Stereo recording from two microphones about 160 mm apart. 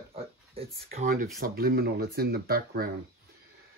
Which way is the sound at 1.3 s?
70° right (ahead or behind).